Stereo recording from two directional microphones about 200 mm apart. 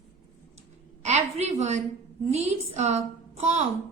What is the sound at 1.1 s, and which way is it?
A woman's voice, 35° right (ahead or behind).